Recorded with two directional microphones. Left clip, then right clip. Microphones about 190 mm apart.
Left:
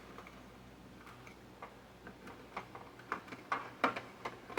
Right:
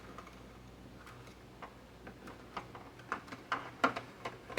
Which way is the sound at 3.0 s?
15° right (ahead or behind).